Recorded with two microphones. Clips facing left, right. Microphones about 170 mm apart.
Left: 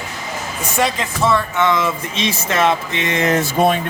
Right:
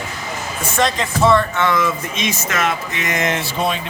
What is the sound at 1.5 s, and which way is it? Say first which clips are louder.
Speech: left 1 dB; 25° left (ahead or behind).